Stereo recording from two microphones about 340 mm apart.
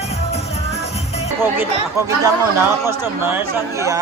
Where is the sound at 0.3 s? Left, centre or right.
Centre.